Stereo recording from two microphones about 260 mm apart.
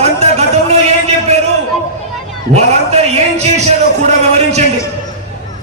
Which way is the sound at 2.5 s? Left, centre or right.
Right.